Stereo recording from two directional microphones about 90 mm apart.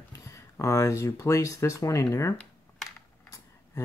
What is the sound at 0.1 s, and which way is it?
Speech, 35° left (ahead or behind).